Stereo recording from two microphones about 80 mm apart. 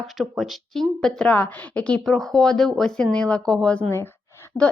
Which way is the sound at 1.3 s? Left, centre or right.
Left.